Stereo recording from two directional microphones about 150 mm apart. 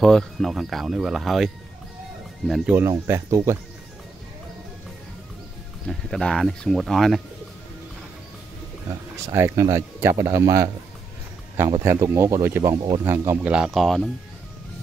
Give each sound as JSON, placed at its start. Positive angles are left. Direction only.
{"t": 0.0, "sound": "speech", "side_deg": 0}
{"t": 2.9, "sound": "speech", "side_deg": -20}
{"t": 5.9, "sound": "speech", "side_deg": 5}
{"t": 9.2, "sound": "speech", "side_deg": -20}
{"t": 11.8, "sound": "speech", "side_deg": -20}
{"t": 13.5, "sound": "speech", "side_deg": -5}